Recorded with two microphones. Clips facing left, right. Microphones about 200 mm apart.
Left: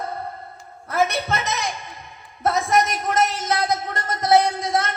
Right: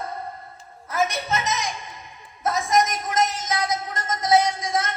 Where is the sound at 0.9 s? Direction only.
60° left (ahead or behind).